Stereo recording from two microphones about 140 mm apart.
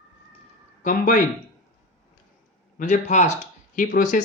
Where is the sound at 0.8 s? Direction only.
75° left (ahead or behind).